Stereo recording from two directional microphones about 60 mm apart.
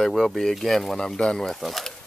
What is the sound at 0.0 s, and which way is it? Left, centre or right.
Speech, centre.